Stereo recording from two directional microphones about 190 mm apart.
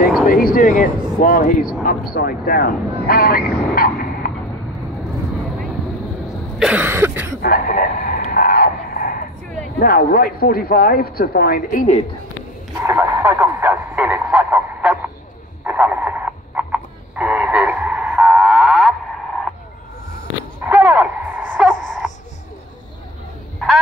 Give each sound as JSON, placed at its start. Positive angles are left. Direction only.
{"t": 0.3, "sound": "speech", "side_deg": 50}
{"t": 6.6, "sound": "cough", "side_deg": -10}
{"t": 7.4, "sound": "a sound", "side_deg": 50}
{"t": 9.8, "sound": "speech", "side_deg": 50}
{"t": 12.8, "sound": "speech", "side_deg": -10}
{"t": 15.6, "sound": "radio", "side_deg": -10}
{"t": 20.6, "sound": "a sound", "side_deg": -10}